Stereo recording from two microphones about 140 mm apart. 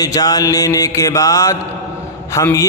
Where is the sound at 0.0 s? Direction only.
25° left (ahead or behind).